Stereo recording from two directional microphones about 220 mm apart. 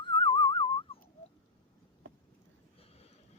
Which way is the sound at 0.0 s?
20° left (ahead or behind).